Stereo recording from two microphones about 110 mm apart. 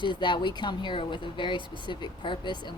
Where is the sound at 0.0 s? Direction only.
45° left (ahead or behind).